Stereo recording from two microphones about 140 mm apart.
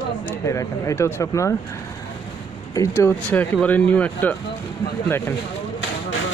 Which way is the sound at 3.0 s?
15° left (ahead or behind).